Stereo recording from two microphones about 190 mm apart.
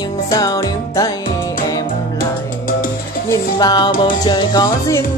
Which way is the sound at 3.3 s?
20° left (ahead or behind).